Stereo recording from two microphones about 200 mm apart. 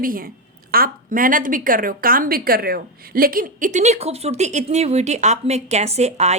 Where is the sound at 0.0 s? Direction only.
45° right (ahead or behind).